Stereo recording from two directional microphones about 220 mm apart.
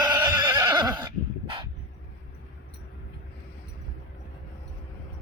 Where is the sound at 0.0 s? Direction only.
15° right (ahead or behind).